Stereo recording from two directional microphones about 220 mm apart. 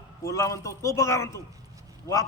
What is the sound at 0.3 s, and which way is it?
Speech, 15° left (ahead or behind).